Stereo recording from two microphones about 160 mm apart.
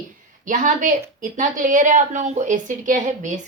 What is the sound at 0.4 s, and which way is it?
A woman's voice, 55° right (ahead or behind).